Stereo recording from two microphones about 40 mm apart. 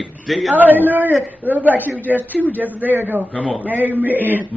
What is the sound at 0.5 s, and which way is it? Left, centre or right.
A woman's voice, right.